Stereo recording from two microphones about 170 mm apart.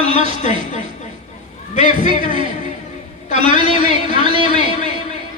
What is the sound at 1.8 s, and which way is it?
Speech, 30° right (ahead or behind).